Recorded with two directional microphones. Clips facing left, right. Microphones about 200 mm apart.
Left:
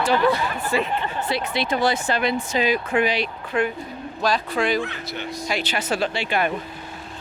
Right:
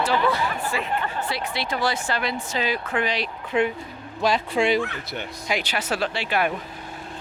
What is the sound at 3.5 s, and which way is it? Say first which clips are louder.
Speech: right 2 dB; 20° right (ahead or behind).